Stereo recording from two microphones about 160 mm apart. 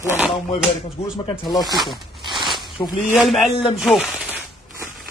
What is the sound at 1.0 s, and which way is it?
Speech, 40° left (ahead or behind).